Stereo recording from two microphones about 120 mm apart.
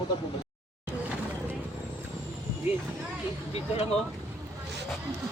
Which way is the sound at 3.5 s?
60° left (ahead or behind).